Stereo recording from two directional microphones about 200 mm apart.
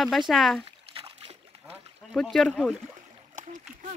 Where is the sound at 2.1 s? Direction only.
Centre (ahead or behind).